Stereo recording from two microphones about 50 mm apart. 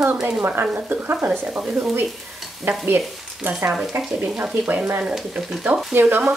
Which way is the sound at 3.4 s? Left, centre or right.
Right.